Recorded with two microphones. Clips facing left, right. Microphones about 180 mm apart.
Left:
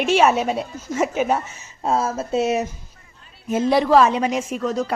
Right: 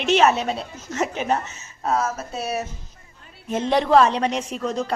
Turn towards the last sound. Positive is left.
turn(degrees=5)  # may be behind; listen again after turning